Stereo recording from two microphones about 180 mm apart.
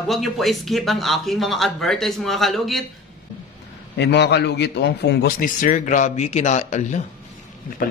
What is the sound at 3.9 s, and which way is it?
A man's voice, 70° left (ahead or behind).